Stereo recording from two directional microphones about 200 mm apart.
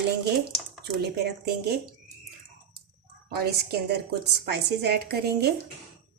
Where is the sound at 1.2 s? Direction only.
55° right (ahead or behind).